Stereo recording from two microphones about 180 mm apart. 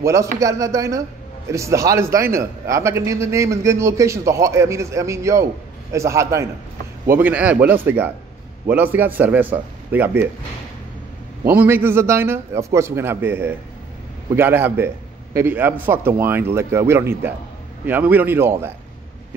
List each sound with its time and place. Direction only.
0.0 s a man's voice: 15° right (ahead or behind)
11.4 s a man's voice: 10° right (ahead or behind)